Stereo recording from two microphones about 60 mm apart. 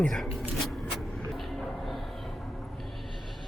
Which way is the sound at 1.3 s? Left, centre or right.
Centre.